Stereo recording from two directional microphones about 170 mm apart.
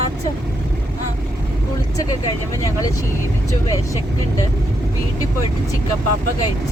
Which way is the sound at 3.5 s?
20° left (ahead or behind).